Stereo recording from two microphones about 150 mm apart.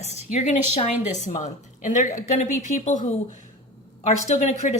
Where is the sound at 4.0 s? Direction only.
50° left (ahead or behind).